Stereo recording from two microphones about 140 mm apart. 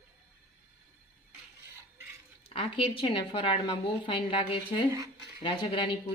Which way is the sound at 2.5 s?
40° left (ahead or behind).